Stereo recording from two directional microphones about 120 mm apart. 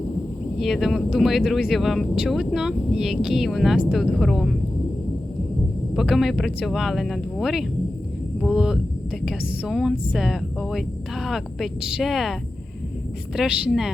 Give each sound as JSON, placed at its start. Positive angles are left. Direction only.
{"t": 0.6, "sound": "speech", "side_deg": 0}
{"t": 5.9, "sound": "speech", "side_deg": 0}